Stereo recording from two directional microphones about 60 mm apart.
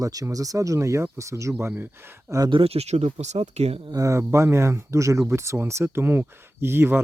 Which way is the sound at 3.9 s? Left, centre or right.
Right.